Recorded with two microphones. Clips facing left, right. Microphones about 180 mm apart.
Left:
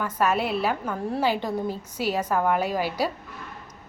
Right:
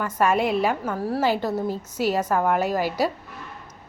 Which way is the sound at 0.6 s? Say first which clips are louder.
Right 3 dB; 5° right (ahead or behind).